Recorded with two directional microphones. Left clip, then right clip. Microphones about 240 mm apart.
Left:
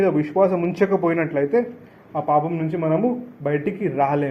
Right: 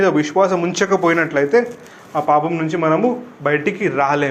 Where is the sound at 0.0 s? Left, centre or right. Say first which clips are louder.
Right 3 dB; centre.